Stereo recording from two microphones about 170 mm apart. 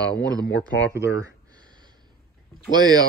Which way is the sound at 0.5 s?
90° left.